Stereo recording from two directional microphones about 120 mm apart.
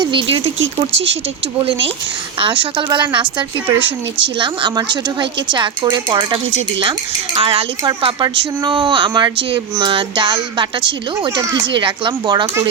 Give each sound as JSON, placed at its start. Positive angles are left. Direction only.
{"t": 0.0, "sound": "speech", "side_deg": -45}
{"t": 2.4, "sound": "speech", "side_deg": -45}